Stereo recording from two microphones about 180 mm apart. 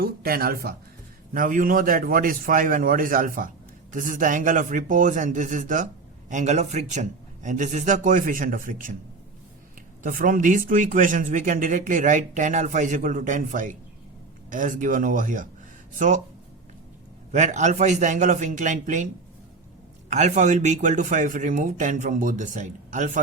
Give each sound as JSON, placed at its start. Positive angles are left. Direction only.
{"t": 0.0, "sound": "a man's voice", "side_deg": -55}
{"t": 10.0, "sound": "a man's voice", "side_deg": -50}
{"t": 17.3, "sound": "a man's voice", "side_deg": -40}
{"t": 20.1, "sound": "a man's voice", "side_deg": -40}